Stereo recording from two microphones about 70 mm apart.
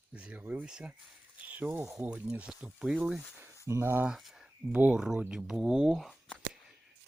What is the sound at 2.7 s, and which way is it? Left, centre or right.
Speech, centre.